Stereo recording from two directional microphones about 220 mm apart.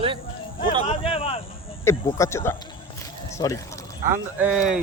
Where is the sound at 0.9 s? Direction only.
25° left (ahead or behind).